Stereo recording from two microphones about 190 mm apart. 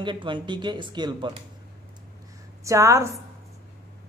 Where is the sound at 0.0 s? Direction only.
25° right (ahead or behind).